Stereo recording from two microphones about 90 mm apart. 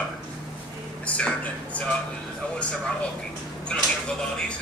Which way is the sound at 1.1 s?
15° left (ahead or behind).